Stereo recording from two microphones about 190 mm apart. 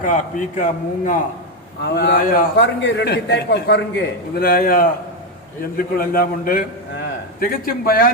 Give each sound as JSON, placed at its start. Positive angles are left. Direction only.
{"t": 0.0, "sound": "a man's voice", "side_deg": 40}
{"t": 1.9, "sound": "a man's voice", "side_deg": 60}
{"t": 4.4, "sound": "a man's voice", "side_deg": 50}